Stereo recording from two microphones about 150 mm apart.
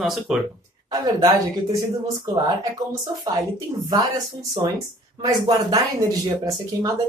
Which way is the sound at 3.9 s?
25° right (ahead or behind).